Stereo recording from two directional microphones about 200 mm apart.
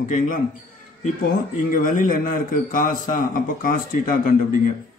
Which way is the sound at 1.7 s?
40° left (ahead or behind).